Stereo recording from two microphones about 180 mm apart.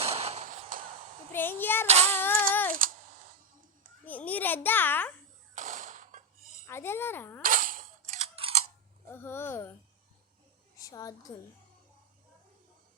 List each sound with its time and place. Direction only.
0.0 s a sound: 35° right (ahead or behind)
1.3 s speech: 10° left (ahead or behind)
1.9 s child singing: 35° right (ahead or behind)
2.1 s a sound: 10° left (ahead or behind)
4.0 s babbling: 10° left (ahead or behind)
5.5 s a sound: 50° right (ahead or behind)
6.7 s speech: 15° left (ahead or behind)
7.4 s cap gun: 50° right (ahead or behind)
8.4 s scissors: 30° right (ahead or behind)
9.0 s speech: 10° left (ahead or behind)
10.8 s a woman's voice: 20° left (ahead or behind)